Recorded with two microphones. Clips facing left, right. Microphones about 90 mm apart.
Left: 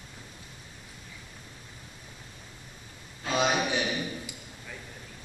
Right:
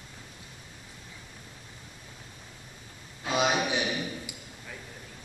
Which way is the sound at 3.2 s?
15° right (ahead or behind).